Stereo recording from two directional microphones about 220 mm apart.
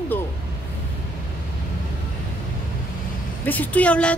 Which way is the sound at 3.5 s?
5° left (ahead or behind).